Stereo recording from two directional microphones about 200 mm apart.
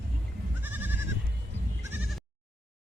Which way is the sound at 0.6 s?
10° right (ahead or behind).